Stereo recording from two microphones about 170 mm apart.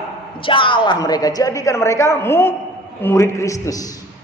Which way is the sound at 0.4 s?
30° left (ahead or behind).